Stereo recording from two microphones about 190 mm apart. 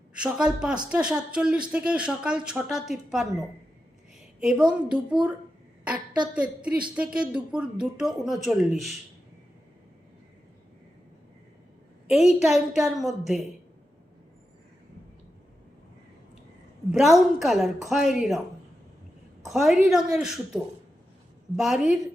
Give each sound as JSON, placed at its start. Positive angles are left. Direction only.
{"t": 0.2, "sound": "speech", "side_deg": -5}
{"t": 4.4, "sound": "a woman's voice", "side_deg": -5}
{"t": 6.9, "sound": "speech", "side_deg": -5}
{"t": 12.0, "sound": "speech", "side_deg": -5}
{"t": 16.9, "sound": "speech", "side_deg": 0}
{"t": 19.5, "sound": "speech", "side_deg": 0}